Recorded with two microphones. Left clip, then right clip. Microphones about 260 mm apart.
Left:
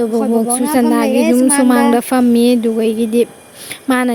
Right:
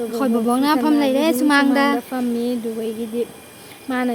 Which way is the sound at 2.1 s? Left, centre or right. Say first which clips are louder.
Left 11 dB; left.